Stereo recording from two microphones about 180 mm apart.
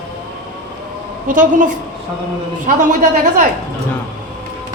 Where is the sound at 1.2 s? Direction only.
50° right (ahead or behind).